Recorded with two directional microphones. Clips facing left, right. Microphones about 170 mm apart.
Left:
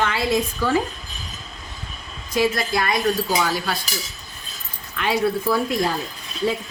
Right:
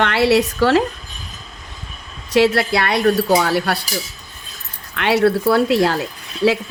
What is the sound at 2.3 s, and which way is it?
Speech, 70° right (ahead or behind).